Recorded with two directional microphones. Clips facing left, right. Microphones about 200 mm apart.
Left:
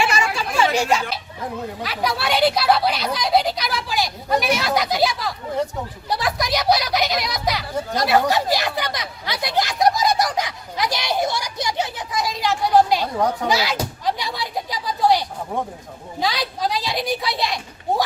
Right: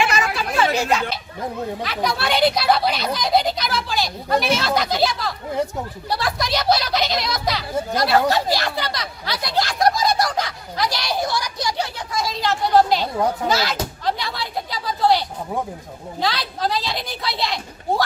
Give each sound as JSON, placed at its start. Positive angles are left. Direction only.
{"t": 0.7, "sound": "a child's voice", "side_deg": 0}
{"t": 13.1, "sound": "speech", "side_deg": -5}
{"t": 13.5, "sound": "door", "side_deg": 10}
{"t": 16.2, "sound": "speech", "side_deg": 15}